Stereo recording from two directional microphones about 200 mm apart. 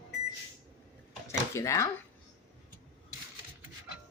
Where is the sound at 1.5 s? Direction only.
15° left (ahead or behind).